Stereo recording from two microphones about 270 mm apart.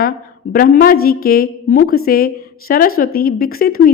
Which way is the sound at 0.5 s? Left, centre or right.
Left.